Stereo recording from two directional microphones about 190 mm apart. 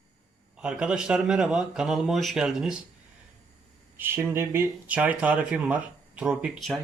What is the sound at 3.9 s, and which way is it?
Speech, 10° right (ahead or behind).